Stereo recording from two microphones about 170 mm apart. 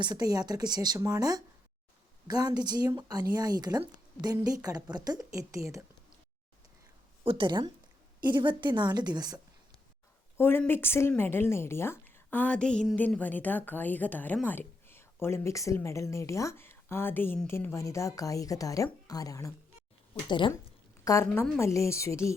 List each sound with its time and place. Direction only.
0.0 s a woman's voice: 25° right (ahead or behind)
7.3 s a woman's voice: 30° right (ahead or behind)
10.3 s a woman's voice: 10° left (ahead or behind)